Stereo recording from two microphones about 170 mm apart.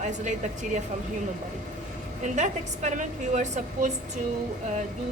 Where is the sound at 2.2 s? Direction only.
45° right (ahead or behind).